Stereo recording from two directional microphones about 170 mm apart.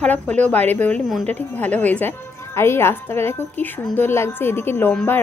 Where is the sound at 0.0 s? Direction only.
10° left (ahead or behind).